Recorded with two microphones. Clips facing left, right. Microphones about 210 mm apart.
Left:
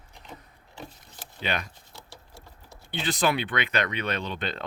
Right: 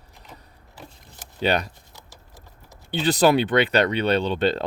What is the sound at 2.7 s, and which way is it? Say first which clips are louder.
Speech: right 8 dB; 40° right (ahead or behind).